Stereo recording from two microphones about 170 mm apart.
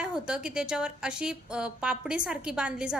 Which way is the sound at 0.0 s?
5° right (ahead or behind).